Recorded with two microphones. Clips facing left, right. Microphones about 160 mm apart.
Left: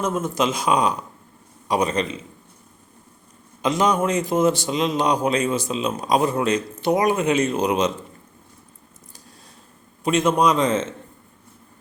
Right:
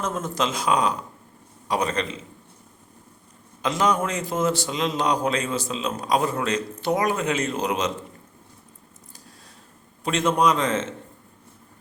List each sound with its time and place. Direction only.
0.0 s a man's voice: 10° left (ahead or behind)
3.6 s a man's voice: 15° left (ahead or behind)
10.0 s a man's voice: 15° left (ahead or behind)